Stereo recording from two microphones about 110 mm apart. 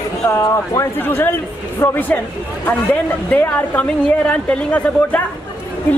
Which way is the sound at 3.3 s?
15° left (ahead or behind).